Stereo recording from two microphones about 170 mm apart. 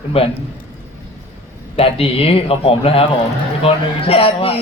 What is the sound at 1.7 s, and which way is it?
Speech, 35° left (ahead or behind).